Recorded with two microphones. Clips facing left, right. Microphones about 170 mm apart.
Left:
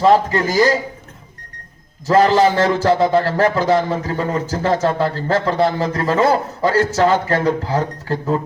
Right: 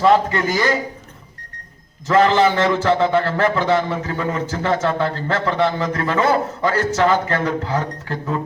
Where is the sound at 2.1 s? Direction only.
35° left (ahead or behind).